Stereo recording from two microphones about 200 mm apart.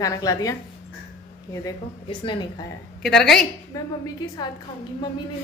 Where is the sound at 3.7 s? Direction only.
20° left (ahead or behind).